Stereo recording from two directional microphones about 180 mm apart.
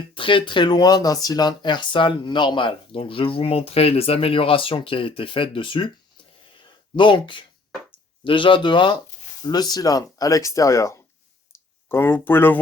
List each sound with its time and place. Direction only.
0.1 s speech: 30° left (ahead or behind)
6.9 s speech: 25° left (ahead or behind); by 12.5 s 10° left (ahead or behind)